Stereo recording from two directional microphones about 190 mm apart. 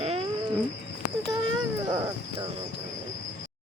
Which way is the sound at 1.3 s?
20° right (ahead or behind).